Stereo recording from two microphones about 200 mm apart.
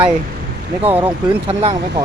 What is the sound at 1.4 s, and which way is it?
Speech, 25° right (ahead or behind).